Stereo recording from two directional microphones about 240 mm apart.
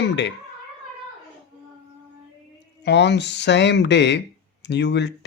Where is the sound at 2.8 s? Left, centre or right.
Left.